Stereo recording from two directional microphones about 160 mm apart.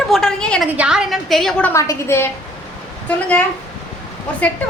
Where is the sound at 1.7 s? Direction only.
20° left (ahead or behind).